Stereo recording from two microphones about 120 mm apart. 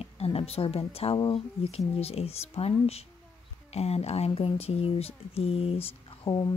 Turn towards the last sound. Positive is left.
turn(degrees=35)  # may be behind; listen again after turning